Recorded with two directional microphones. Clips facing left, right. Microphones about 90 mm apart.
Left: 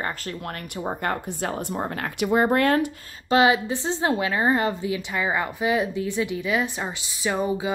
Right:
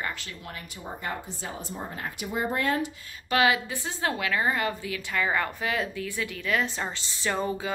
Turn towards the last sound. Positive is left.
turn(degrees=15)  # may be behind; listen again after turning